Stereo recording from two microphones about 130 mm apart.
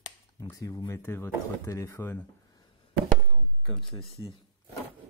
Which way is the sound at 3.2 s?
Centre (ahead or behind).